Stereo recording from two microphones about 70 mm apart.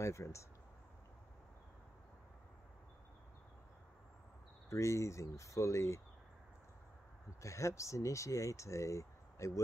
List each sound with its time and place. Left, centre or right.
0.0 s speech: left
4.6 s speech: left
7.4 s speech: left